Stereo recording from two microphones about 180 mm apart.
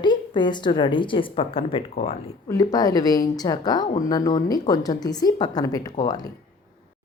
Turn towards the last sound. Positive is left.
turn(degrees=20)  # may be behind; listen again after turning